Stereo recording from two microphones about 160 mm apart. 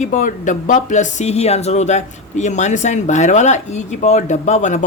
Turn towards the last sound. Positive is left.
turn(degrees=50)  # may be behind; listen again after turning